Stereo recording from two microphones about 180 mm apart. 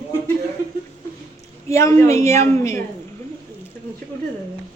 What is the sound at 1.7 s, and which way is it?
A woman's voice, 15° left (ahead or behind).